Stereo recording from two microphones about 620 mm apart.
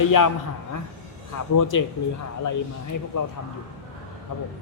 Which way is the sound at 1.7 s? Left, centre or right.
Left.